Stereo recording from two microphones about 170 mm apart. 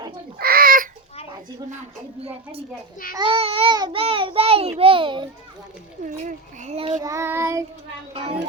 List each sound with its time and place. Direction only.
0.3 s bird: 60° right (ahead or behind)
2.2 s a child's voice: 35° right (ahead or behind)
6.1 s a child's voice: 45° right (ahead or behind)
7.0 s child singing: 15° right (ahead or behind)
8.1 s a child's voice: 35° right (ahead or behind)